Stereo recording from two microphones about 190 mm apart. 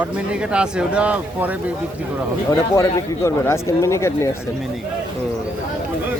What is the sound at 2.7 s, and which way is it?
A man's voice, 15° left (ahead or behind).